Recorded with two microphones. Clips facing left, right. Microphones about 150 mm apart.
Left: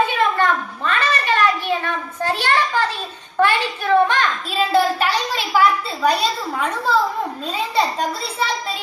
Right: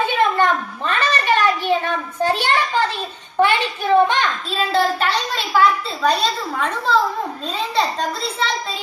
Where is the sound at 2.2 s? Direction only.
20° right (ahead or behind).